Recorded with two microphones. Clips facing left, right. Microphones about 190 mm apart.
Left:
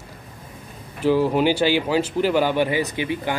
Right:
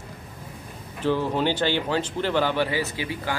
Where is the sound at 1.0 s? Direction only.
10° left (ahead or behind).